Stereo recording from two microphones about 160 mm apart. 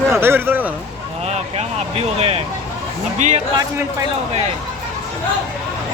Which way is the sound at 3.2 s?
50° right (ahead or behind).